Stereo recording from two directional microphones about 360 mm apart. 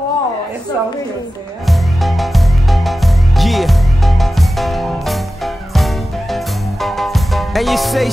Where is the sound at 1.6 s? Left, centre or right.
Centre.